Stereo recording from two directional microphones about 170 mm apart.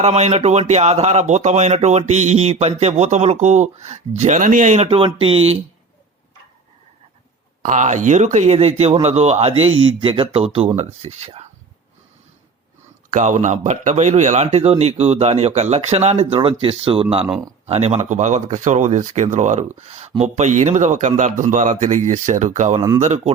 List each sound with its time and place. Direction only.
0.0 s speech: 40° right (ahead or behind)
7.6 s speech: 45° right (ahead or behind)
13.1 s speech: 45° right (ahead or behind)